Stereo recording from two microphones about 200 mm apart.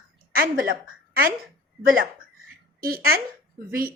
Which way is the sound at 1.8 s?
45° right (ahead or behind).